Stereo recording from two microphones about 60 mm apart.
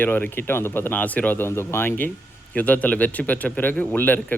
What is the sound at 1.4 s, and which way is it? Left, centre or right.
A man's voice, left.